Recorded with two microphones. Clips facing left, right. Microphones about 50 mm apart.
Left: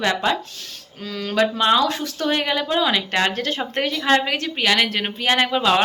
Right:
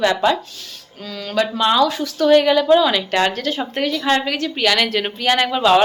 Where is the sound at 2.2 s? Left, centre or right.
Left.